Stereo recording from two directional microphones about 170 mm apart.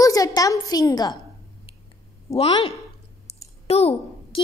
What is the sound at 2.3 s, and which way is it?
A woman's voice, 35° left (ahead or behind).